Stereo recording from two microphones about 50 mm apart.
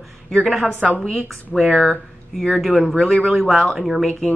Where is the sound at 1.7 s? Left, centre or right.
Left.